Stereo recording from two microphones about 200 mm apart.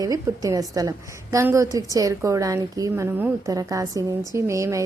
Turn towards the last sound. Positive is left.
turn(degrees=-15)  # may be behind; listen again after turning